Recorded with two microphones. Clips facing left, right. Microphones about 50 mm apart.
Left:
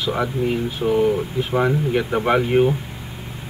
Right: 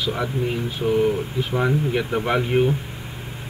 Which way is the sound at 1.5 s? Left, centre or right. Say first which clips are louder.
Left 2 dB; centre.